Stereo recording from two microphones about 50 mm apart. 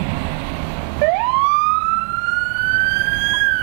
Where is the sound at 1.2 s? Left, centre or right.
Centre.